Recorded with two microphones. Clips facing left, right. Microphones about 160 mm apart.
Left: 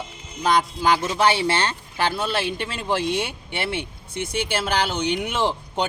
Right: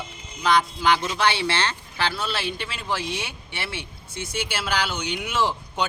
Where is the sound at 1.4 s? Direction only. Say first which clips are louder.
Left 3 dB; 45° left (ahead or behind).